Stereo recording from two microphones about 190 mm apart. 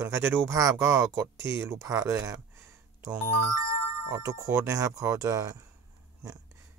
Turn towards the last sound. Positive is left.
turn(degrees=-15)  # may be behind; listen again after turning